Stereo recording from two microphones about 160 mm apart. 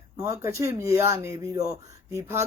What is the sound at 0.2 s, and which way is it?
Speech, 15° right (ahead or behind).